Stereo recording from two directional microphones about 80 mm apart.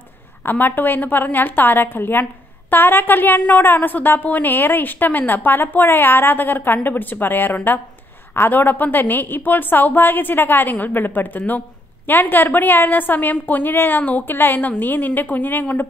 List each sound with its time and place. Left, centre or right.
0.5 s a woman's voice: left